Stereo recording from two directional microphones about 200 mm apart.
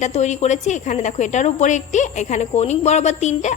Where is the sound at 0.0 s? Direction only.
35° left (ahead or behind).